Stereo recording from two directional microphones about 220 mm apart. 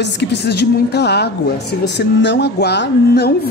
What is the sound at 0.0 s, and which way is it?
Speech, 50° left (ahead or behind).